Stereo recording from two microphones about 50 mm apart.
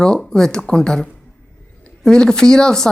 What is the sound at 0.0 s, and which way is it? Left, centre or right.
Speech, centre.